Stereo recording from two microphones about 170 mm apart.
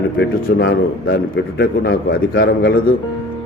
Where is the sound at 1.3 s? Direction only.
65° left (ahead or behind).